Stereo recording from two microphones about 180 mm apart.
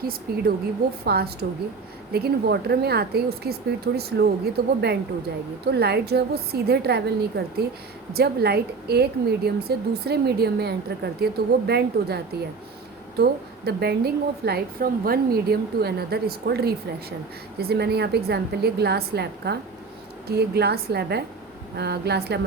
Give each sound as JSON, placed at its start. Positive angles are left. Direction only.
{"t": 0.0, "sound": "a woman's voice", "side_deg": -55}
{"t": 13.7, "sound": "a woman's voice", "side_deg": -65}